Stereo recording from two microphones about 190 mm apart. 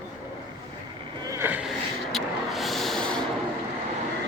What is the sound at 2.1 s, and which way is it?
Vehicle, centre (ahead or behind).